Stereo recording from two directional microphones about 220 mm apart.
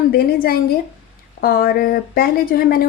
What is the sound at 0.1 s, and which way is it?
Speech, 45° left (ahead or behind).